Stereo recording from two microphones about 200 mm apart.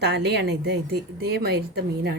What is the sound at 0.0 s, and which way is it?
A woman's voice, 55° right (ahead or behind).